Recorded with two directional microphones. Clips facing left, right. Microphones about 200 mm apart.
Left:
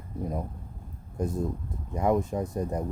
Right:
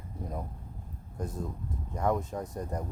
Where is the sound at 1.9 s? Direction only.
10° left (ahead or behind).